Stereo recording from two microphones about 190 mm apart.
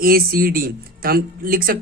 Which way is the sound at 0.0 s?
50° right (ahead or behind).